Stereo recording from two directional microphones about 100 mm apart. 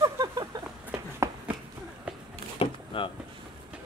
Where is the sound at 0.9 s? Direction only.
25° right (ahead or behind).